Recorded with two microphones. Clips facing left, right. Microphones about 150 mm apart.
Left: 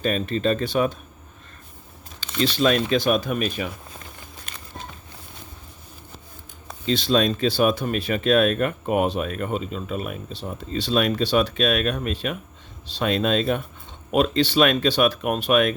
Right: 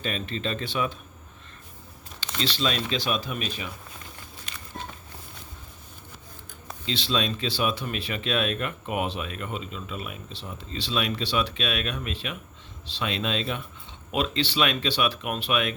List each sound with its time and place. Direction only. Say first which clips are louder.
0.0 s speech: left 8 dB; 45° left (ahead or behind)
2.4 s speech: left 8 dB; 50° left (ahead or behind)
4.5 s a sound: left 1 dB; 50° left (ahead or behind)
6.8 s speech: left 8 dB; 45° left (ahead or behind)